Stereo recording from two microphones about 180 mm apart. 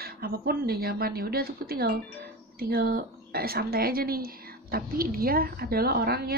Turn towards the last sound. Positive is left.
turn(degrees=-60)  # may be behind; listen again after turning